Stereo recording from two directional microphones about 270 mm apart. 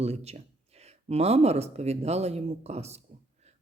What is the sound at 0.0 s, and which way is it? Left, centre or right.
A man's voice, right.